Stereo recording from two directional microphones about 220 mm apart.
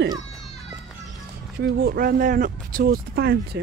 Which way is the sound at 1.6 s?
45° right (ahead or behind).